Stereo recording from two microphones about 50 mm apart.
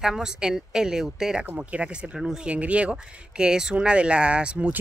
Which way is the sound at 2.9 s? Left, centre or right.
Centre.